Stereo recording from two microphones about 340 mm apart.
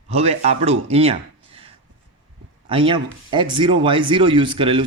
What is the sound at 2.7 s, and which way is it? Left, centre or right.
A man's voice, centre.